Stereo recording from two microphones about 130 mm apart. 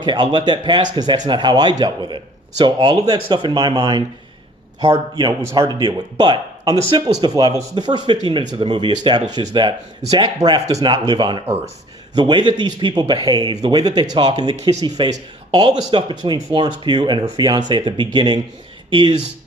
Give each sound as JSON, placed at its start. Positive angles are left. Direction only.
{"t": 0.0, "sound": "speech", "side_deg": -35}